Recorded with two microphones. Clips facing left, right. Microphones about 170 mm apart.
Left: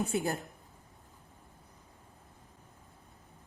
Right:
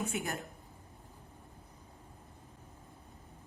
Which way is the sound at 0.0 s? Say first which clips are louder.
Left 5 dB; 35° left (ahead or behind).